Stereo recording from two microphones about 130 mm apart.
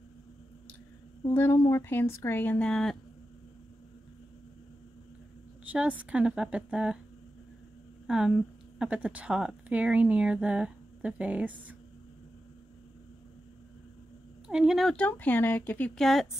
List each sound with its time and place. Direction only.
1.3 s speech: 15° left (ahead or behind)
5.7 s a woman's voice: 10° right (ahead or behind)
8.1 s a woman's voice: 5° right (ahead or behind)
14.5 s speech: 5° right (ahead or behind); by 15.9 s 15° left (ahead or behind)
16.0 s a woman's voice: centre (ahead or behind)